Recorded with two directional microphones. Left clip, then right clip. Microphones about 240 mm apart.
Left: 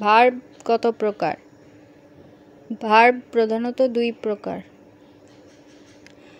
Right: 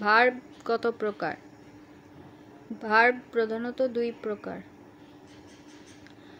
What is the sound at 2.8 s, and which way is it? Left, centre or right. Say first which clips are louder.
Speech: left 7 dB; left.